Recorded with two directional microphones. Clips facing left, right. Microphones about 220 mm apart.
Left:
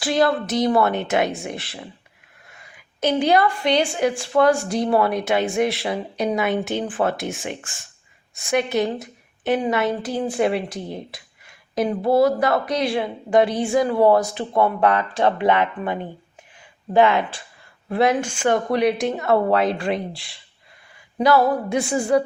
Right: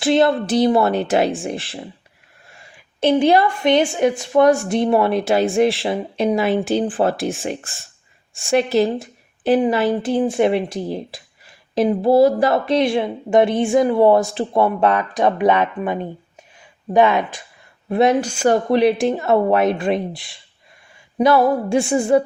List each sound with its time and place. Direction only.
0.0 s speech: 25° right (ahead or behind)
18.2 s speech: 40° right (ahead or behind)
18.7 s speech: 30° right (ahead or behind)